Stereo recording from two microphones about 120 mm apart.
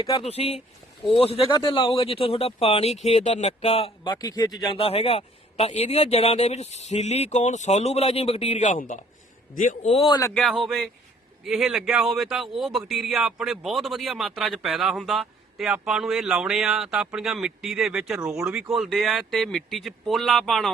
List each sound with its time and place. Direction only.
0.2 s a man's voice: 55° left (ahead or behind)
1.5 s a man's voice: 40° left (ahead or behind)
4.1 s speech: 30° left (ahead or behind)
4.8 s a man's voice: 55° left (ahead or behind); by 10.0 s 85° left
10.3 s speech: centre (ahead or behind)